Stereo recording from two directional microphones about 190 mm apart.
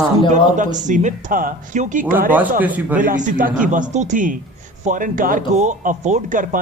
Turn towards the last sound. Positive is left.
turn(degrees=-45)  # may be behind; listen again after turning